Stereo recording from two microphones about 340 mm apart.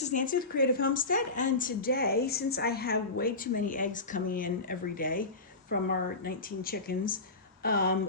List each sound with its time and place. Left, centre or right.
0.0 s a woman's voice: left